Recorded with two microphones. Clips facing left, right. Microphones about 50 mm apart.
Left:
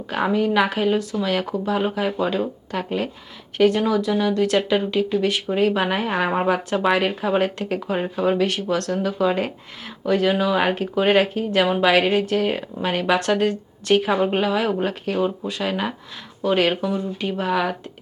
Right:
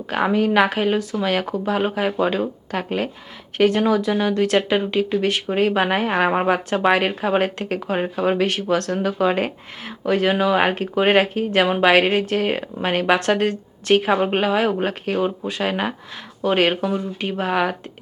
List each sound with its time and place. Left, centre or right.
0.1 s speech: centre
0.8 s speech: right
1.1 s speech: centre
5.1 s speech: centre
5.5 s speech: right